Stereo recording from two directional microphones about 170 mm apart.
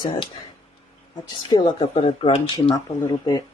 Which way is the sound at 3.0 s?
20° left (ahead or behind).